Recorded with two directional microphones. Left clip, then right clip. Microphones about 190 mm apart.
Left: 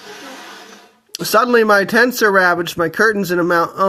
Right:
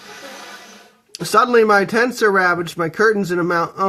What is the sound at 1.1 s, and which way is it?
Speech, 20° left (ahead or behind).